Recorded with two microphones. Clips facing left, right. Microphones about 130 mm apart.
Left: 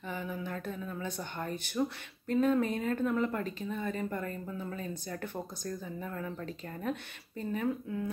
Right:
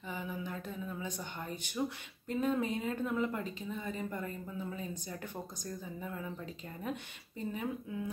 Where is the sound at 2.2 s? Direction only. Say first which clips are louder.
Left 5 dB; 60° left (ahead or behind).